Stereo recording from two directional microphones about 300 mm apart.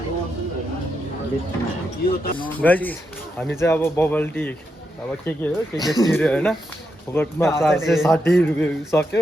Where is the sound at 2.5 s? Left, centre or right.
Centre.